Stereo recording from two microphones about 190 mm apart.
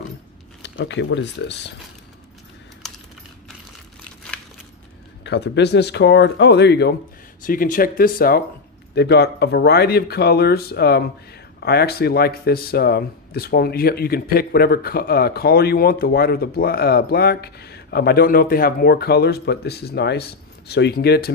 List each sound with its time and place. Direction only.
0.6 s speech: 65° left (ahead or behind)
5.2 s speech: 65° left (ahead or behind)
7.4 s speech: 45° left (ahead or behind)
8.9 s speech: 60° left (ahead or behind)